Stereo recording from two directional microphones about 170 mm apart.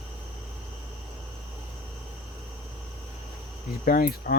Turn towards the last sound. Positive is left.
turn(degrees=60)  # may be behind; listen again after turning